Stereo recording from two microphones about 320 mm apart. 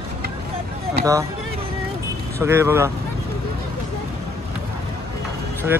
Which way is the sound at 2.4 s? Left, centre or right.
Centre.